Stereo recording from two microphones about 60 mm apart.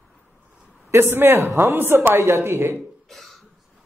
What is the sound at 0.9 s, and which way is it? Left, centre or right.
Speech, right.